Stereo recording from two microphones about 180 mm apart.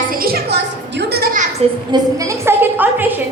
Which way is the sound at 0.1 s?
55° right (ahead or behind).